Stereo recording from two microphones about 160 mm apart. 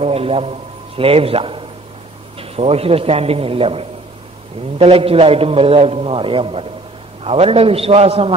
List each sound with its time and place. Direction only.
0.0 s a man's voice: 40° right (ahead or behind)